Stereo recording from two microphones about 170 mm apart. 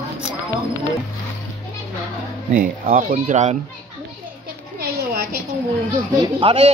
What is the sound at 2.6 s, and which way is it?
Speech, 50° right (ahead or behind).